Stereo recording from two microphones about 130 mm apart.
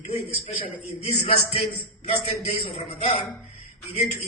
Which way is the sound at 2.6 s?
55° left (ahead or behind).